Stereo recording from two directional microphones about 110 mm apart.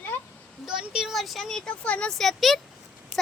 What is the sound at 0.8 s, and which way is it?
Speech, 5° right (ahead or behind).